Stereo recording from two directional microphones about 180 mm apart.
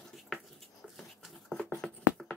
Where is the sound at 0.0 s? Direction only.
Centre (ahead or behind).